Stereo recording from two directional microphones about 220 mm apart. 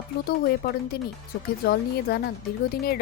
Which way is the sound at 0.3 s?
45° left (ahead or behind).